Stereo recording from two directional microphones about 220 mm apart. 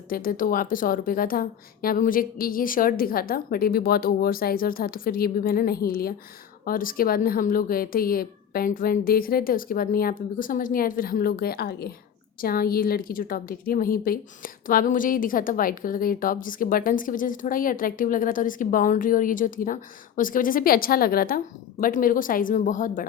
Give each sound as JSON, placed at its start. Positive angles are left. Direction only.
{"t": 0.1, "sound": "a woman's voice", "side_deg": 40}